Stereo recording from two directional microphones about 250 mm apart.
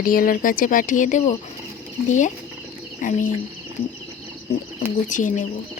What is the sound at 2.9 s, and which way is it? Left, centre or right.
Speech, left.